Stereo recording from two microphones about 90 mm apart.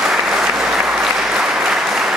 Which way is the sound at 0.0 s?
5° right (ahead or behind).